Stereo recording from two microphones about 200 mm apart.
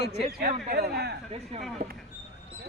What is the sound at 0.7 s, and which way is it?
Speech, 55° right (ahead or behind).